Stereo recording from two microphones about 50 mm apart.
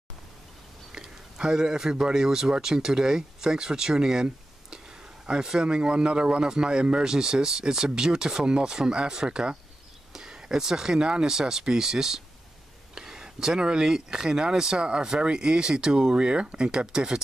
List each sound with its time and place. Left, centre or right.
0.9 s a man's voice: centre